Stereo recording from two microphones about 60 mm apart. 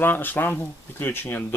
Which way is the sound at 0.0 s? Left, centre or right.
Left.